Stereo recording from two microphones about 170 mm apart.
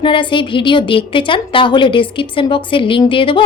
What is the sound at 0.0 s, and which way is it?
A woman's voice, 30° left (ahead or behind).